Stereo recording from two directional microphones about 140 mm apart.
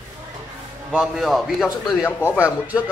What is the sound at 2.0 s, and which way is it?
Speech, 20° left (ahead or behind).